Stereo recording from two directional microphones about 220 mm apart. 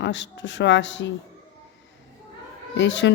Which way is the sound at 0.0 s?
55° left (ahead or behind).